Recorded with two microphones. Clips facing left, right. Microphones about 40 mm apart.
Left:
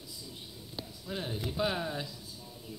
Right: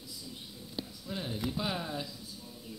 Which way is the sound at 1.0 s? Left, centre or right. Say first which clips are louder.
Even; centre.